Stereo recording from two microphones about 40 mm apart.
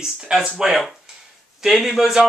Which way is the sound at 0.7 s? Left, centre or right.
Centre.